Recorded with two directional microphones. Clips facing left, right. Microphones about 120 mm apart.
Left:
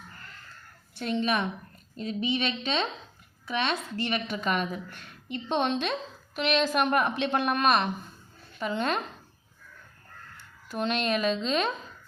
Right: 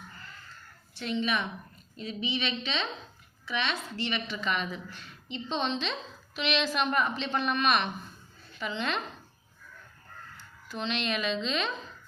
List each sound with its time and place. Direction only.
0.9 s a woman's voice: 45° left (ahead or behind)
10.7 s a woman's voice: 50° left (ahead or behind)